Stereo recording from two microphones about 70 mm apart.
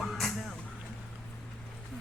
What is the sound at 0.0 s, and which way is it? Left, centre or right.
Vehicle, centre.